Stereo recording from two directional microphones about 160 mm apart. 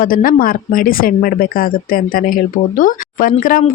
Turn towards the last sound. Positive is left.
turn(degrees=60)  # may be behind; listen again after turning